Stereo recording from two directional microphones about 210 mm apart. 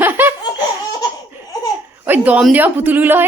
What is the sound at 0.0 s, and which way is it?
Laughter, 10° right (ahead or behind).